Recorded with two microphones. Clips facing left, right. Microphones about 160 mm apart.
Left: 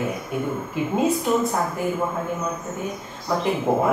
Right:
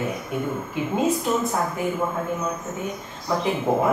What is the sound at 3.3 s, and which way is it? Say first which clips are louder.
Speech: left 1 dB; centre (ahead or behind).